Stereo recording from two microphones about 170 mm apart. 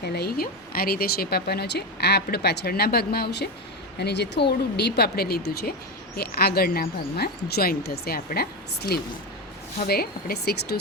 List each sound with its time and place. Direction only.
0.0 s speech: 70° left (ahead or behind)